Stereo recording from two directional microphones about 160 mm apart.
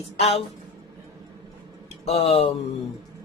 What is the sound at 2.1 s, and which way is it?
Speech, 40° left (ahead or behind).